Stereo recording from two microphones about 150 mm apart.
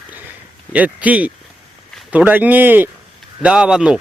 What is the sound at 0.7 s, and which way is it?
A man's voice, 10° right (ahead or behind).